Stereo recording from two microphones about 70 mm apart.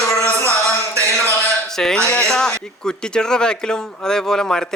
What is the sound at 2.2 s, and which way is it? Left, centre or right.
Speech, centre.